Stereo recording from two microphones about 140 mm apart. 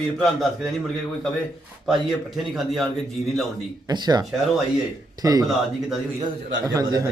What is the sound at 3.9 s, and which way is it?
A man's voice, 30° right (ahead or behind).